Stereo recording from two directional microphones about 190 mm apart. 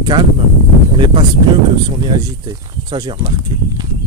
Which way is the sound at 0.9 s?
25° right (ahead or behind).